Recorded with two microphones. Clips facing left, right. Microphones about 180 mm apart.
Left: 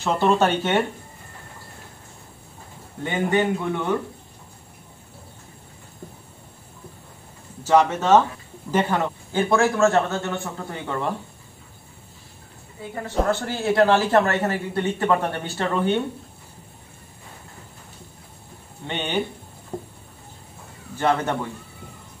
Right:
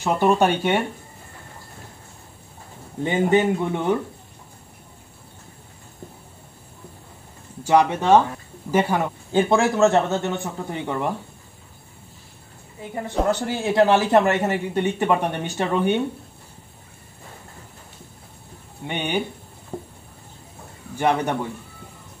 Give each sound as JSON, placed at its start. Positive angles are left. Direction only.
{"t": 0.0, "sound": "a man's voice", "side_deg": -15}
{"t": 3.0, "sound": "speech", "side_deg": -20}
{"t": 7.6, "sound": "a man's voice", "side_deg": -15}
{"t": 12.9, "sound": "a man's voice", "side_deg": -15}
{"t": 18.9, "sound": "a man's voice", "side_deg": -15}
{"t": 19.7, "sound": "a sound", "side_deg": -5}
{"t": 21.0, "sound": "a man's voice", "side_deg": -15}